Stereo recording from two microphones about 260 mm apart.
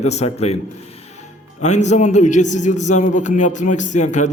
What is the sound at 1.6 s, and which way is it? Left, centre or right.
A man's voice, left.